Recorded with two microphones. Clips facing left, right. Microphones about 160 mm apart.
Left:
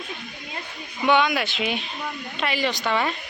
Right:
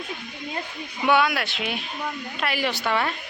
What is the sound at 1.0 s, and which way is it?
Speech, 5° right (ahead or behind).